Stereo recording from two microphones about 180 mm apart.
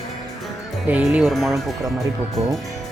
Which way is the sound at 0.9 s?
10° right (ahead or behind).